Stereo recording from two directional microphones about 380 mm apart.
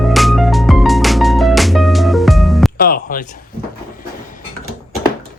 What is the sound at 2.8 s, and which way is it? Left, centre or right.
Speech, left.